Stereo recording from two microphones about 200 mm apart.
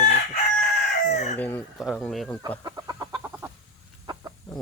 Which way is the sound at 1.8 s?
Centre (ahead or behind).